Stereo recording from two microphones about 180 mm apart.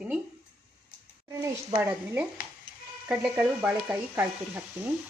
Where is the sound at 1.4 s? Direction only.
15° right (ahead or behind).